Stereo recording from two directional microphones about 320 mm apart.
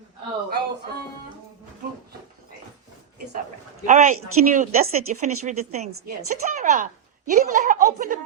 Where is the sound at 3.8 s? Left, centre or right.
Right.